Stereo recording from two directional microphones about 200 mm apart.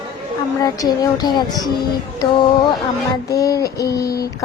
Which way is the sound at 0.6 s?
20° left (ahead or behind).